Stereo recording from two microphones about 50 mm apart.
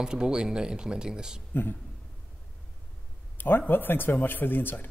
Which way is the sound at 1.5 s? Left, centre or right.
Left.